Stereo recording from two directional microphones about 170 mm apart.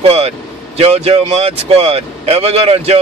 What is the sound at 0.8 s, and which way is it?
Speech, 35° right (ahead or behind).